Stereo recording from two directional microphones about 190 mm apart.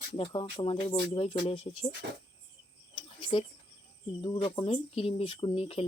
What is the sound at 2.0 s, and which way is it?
Speech, 60° right (ahead or behind).